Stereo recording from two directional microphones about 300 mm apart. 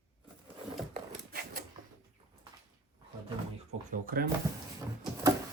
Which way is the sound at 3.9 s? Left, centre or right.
Right.